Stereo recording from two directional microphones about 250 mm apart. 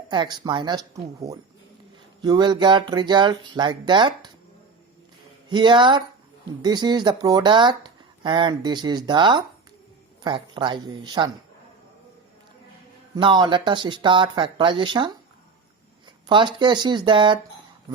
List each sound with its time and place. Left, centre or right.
0.1 s speech: centre
5.5 s speech: centre
13.1 s speech: centre
16.2 s speech: centre